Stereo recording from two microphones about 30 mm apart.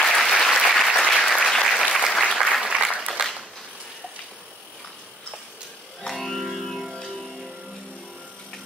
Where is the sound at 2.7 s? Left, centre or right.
Right.